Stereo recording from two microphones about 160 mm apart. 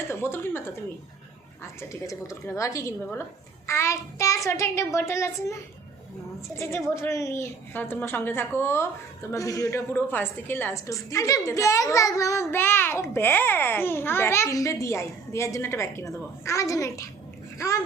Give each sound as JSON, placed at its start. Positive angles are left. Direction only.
{"t": 0.1, "sound": "speech", "side_deg": 15}
{"t": 1.8, "sound": "a woman's voice", "side_deg": 20}
{"t": 3.7, "sound": "child singing", "side_deg": 15}
{"t": 4.4, "sound": "a woman's voice", "side_deg": 15}
{"t": 6.6, "sound": "a woman's voice", "side_deg": 15}